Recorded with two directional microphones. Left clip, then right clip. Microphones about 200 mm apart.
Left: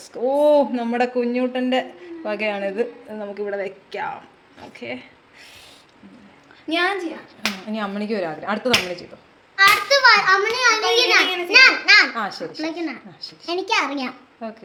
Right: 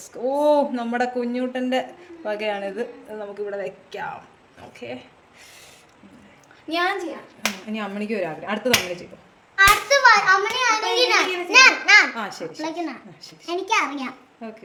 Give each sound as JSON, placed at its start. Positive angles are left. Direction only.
{"t": 0.2, "sound": "speech", "side_deg": 0}
{"t": 6.7, "sound": "a child's voice", "side_deg": 20}
{"t": 7.7, "sound": "speech", "side_deg": 0}
{"t": 12.5, "sound": "a woman's voice", "side_deg": 15}